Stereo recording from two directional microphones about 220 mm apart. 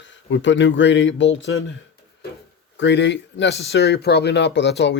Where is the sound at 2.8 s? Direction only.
55° left (ahead or behind).